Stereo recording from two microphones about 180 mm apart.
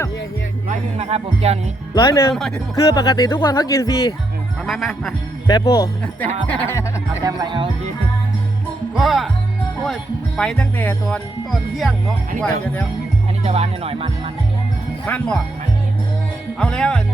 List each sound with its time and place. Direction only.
0.9 s speech: 35° right (ahead or behind)
2.0 s speech: 20° left (ahead or behind)
4.6 s speech: centre (ahead or behind)
5.5 s speech: 20° left (ahead or behind)
7.3 s speech: 25° right (ahead or behind)
9.0 s speech: centre (ahead or behind)
13.4 s speech: 35° right (ahead or behind)
15.0 s speech: 5° left (ahead or behind)
16.6 s speech: 5° left (ahead or behind)